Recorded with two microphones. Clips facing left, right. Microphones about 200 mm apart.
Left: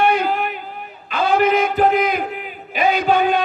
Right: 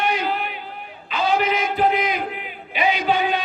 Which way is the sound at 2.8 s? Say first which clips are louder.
Left 4 dB; 45° left (ahead or behind).